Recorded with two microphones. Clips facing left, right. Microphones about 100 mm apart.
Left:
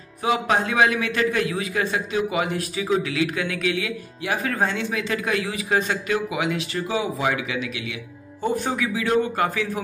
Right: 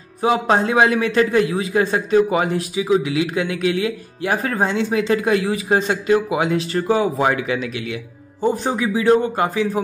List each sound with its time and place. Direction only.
0.2 s speech: 30° right (ahead or behind)
2.5 s speech: 15° right (ahead or behind); by 4.6 s 40° right (ahead or behind)
4.6 s speech: 25° right (ahead or behind); by 7.6 s 40° right (ahead or behind)
8.4 s speech: 25° right (ahead or behind)